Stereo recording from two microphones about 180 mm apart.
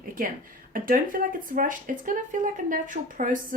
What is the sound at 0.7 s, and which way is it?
A woman's voice, 50° right (ahead or behind).